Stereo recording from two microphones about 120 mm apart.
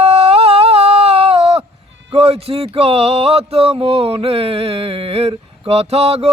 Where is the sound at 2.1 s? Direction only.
55° right (ahead or behind).